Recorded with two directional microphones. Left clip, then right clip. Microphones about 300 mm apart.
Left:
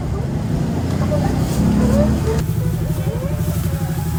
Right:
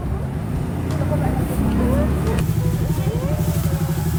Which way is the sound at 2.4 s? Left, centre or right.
Centre.